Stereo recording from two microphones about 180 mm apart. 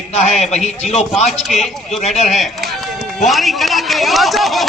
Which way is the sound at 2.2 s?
Centre (ahead or behind).